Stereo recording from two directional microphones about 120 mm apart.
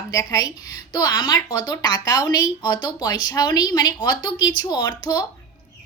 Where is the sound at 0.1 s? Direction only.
30° left (ahead or behind).